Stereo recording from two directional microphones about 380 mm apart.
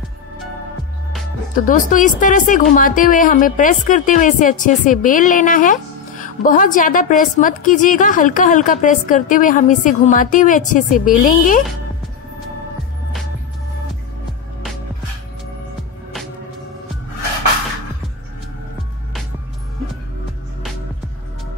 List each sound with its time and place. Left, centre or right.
1.6 s a woman's voice: centre